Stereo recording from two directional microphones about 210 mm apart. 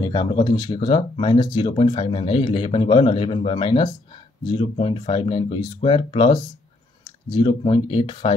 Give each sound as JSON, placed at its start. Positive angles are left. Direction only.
{"t": 0.0, "sound": "speech", "side_deg": 20}